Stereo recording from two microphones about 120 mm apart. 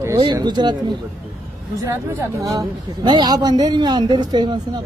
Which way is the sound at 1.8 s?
25° right (ahead or behind).